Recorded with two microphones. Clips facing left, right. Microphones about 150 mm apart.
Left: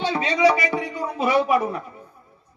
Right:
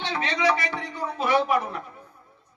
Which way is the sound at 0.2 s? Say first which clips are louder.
Left 5 dB; 15° left (ahead or behind).